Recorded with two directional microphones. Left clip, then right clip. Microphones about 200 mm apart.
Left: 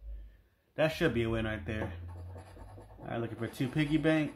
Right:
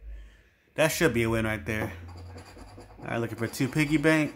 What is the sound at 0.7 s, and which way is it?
Speech, 20° right (ahead or behind).